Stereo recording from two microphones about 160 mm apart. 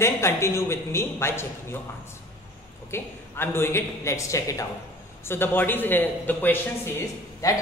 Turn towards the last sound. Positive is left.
turn(degrees=15)  # may be behind; listen again after turning